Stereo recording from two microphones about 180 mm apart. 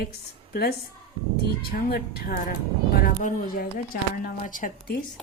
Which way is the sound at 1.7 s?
60° left (ahead or behind).